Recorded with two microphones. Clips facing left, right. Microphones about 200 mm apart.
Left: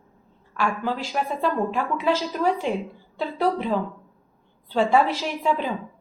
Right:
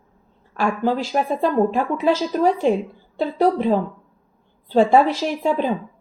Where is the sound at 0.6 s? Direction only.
35° right (ahead or behind).